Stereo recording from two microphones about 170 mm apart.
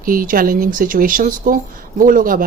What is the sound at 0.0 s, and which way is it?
Speech, 55° right (ahead or behind).